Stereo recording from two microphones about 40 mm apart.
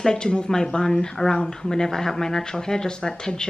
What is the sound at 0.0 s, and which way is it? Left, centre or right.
Speech, centre.